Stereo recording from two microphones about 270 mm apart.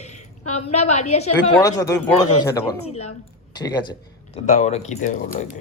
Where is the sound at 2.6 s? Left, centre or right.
Left.